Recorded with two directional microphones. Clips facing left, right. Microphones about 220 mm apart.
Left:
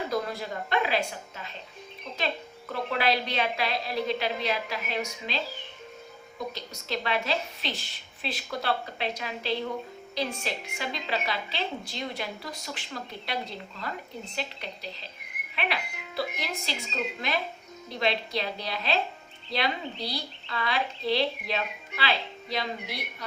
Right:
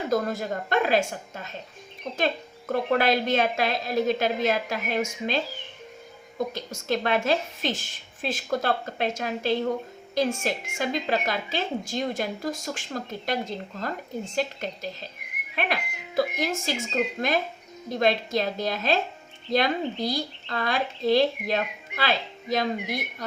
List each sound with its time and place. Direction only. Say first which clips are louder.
0.1 s a woman's voice: right 5 dB; 45° right (ahead or behind)
6.5 s a woman's voice: right 6 dB; 50° right (ahead or behind)